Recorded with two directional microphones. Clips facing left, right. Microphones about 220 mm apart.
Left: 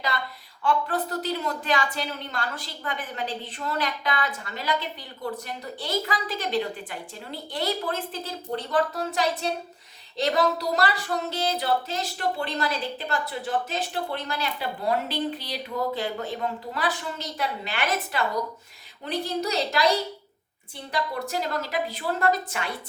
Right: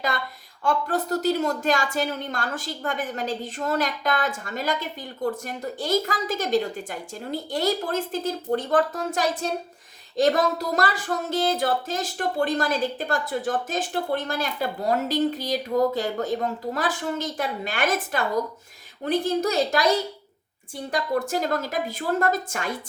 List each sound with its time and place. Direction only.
0.1 s a woman's voice: 45° right (ahead or behind)